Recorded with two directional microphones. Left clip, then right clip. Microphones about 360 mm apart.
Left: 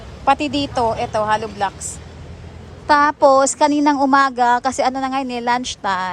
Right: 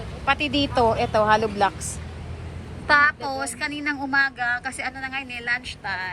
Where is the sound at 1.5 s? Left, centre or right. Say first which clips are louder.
Even; centre.